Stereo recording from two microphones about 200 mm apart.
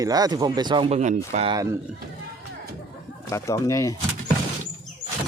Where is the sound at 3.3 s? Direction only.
15° left (ahead or behind).